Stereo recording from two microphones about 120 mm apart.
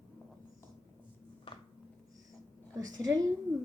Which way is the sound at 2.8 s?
30° right (ahead or behind).